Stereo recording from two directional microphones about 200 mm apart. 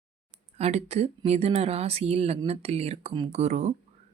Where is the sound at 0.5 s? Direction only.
30° right (ahead or behind).